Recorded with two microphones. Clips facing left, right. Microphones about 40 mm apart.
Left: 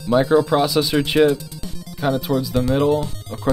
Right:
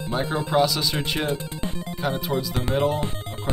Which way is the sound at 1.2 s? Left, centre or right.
Right.